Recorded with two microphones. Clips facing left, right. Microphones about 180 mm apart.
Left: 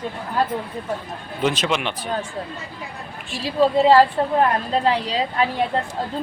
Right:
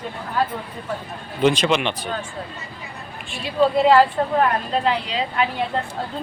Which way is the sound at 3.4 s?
35° left (ahead or behind).